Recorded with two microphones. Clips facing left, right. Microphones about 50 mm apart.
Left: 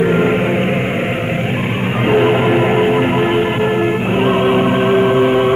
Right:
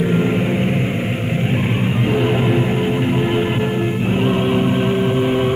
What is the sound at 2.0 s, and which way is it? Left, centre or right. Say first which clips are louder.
Music: left 7 dB; left.